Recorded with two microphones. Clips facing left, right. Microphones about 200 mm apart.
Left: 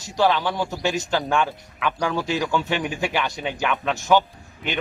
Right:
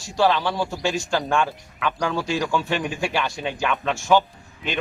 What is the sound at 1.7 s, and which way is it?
Speech, 5° left (ahead or behind).